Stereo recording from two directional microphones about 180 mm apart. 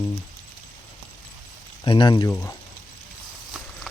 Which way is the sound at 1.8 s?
25° left (ahead or behind).